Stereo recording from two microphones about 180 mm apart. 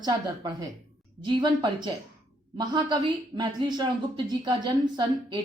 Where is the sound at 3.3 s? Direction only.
25° right (ahead or behind).